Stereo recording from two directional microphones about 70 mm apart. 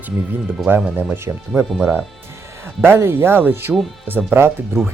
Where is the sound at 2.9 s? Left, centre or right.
Right.